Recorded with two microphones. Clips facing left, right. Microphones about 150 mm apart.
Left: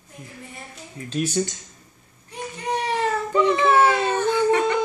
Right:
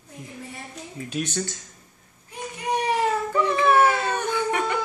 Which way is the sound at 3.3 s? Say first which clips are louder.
Left 3 dB; 20° left (ahead or behind).